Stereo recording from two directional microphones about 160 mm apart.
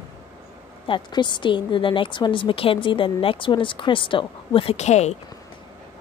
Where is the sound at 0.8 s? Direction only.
30° left (ahead or behind).